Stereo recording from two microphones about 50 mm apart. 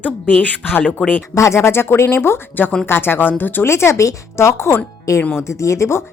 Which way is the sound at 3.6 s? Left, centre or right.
Left.